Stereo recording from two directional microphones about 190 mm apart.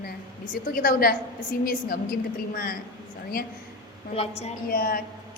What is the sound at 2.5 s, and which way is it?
Speech, 50° left (ahead or behind).